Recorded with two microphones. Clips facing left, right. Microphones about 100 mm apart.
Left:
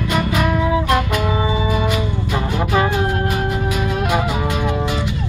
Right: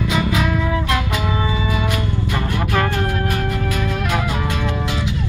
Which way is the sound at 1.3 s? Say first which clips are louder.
Left 2 dB; 20° left (ahead or behind).